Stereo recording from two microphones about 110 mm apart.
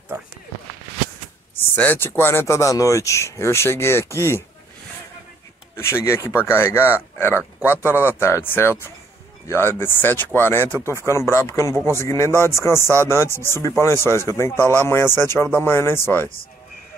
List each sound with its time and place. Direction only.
0.1 s speech: 30° right (ahead or behind)
1.6 s speech: 20° left (ahead or behind)
5.8 s speech: 25° left (ahead or behind)